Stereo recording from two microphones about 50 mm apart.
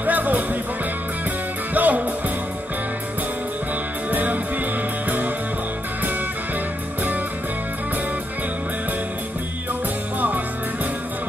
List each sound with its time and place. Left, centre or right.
0.0 s music: right
1.7 s music: right
4.1 s music: right